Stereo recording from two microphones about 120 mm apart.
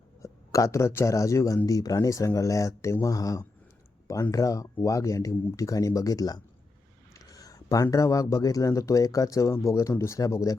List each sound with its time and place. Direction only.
0.2 s speech: 25° left (ahead or behind)